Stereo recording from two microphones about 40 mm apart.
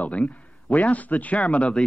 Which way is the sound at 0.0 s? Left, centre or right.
Left.